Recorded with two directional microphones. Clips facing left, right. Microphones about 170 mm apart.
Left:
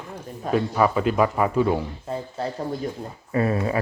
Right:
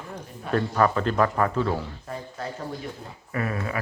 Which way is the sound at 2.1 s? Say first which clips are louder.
Left 7 dB; 30° left (ahead or behind).